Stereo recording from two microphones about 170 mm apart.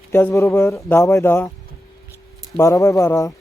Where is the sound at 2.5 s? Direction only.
20° left (ahead or behind).